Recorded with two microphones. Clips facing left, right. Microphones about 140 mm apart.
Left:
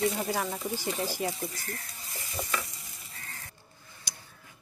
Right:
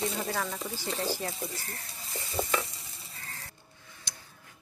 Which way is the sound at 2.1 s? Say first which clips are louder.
Right 4 dB; 30° right (ahead or behind).